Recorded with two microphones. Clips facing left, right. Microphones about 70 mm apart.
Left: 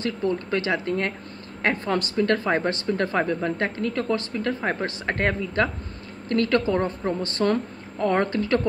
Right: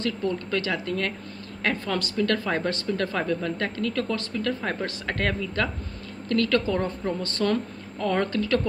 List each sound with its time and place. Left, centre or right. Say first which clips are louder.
0.0 s speech: left 2 dB; left